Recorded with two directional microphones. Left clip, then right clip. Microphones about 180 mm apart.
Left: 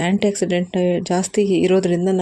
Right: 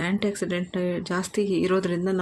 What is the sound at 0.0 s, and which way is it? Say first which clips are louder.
Speech: left 8 dB; 25° left (ahead or behind).